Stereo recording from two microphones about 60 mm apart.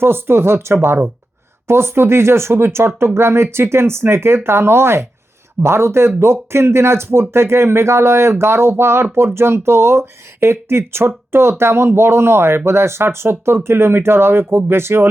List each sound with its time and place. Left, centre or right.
0.0 s speech: right